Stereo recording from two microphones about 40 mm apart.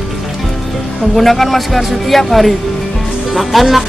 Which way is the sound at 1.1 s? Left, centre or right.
Centre.